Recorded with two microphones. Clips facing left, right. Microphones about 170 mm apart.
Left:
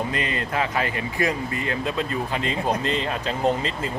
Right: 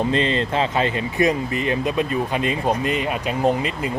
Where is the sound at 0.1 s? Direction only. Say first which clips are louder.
Right 6 dB; 30° right (ahead or behind).